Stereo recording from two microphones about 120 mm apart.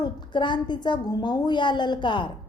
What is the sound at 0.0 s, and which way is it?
A woman's voice, 40° left (ahead or behind).